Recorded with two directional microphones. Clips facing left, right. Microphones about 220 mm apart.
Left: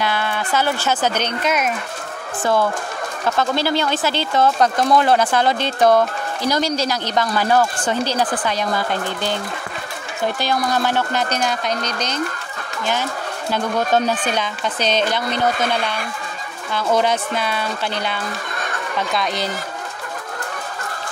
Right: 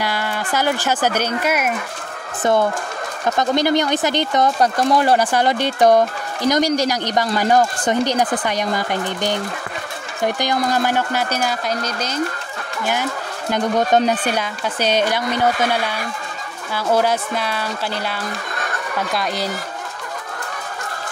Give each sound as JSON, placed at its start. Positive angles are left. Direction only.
{"t": 0.0, "sound": "speech", "side_deg": -10}
{"t": 2.4, "sound": "speech", "side_deg": -20}
{"t": 13.5, "sound": "speech", "side_deg": -15}